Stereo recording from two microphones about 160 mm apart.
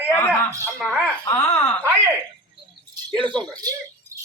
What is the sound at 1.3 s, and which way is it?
Speech, 15° left (ahead or behind).